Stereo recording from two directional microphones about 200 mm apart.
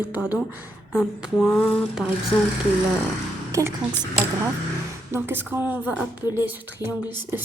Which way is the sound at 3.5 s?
15° right (ahead or behind).